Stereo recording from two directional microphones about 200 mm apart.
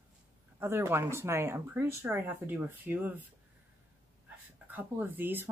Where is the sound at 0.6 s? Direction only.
10° right (ahead or behind).